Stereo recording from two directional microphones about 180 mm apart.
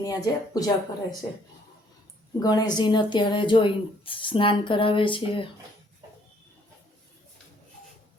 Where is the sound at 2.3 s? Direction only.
20° left (ahead or behind).